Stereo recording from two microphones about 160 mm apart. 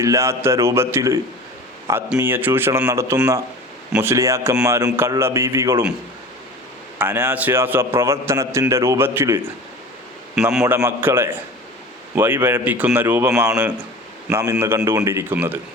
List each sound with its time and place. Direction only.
0.0 s a man's voice: 20° right (ahead or behind)
7.0 s a man's voice: 10° right (ahead or behind)
10.3 s a man's voice: centre (ahead or behind)
10.7 s a man's voice: 15° right (ahead or behind)